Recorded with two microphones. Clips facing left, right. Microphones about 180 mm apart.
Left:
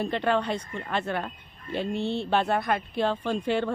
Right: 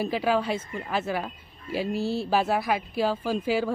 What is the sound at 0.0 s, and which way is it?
Speech, 5° right (ahead or behind).